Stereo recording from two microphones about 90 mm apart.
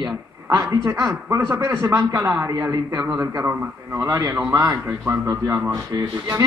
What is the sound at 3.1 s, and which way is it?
Speech, 25° right (ahead or behind).